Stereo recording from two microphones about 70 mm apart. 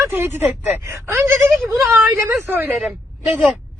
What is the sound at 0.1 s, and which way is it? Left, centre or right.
Speech, right.